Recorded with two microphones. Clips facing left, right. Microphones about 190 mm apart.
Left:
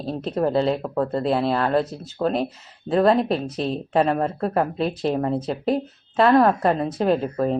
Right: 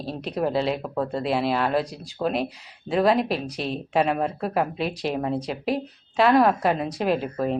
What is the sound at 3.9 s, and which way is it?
A woman's voice, 5° right (ahead or behind).